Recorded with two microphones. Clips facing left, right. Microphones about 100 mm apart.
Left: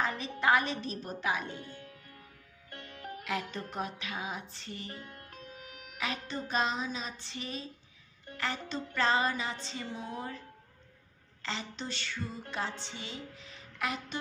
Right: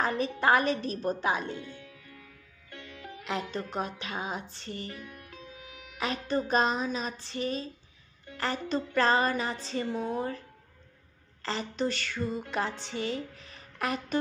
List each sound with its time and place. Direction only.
0.0 s music: 45° right (ahead or behind)
1.5 s music: 40° left (ahead or behind)
3.5 s music: 35° right (ahead or behind)
4.8 s music: 35° left (ahead or behind)
5.9 s music: 40° right (ahead or behind)
8.4 s speech: 40° right (ahead or behind)
11.4 s a woman's voice: 45° right (ahead or behind)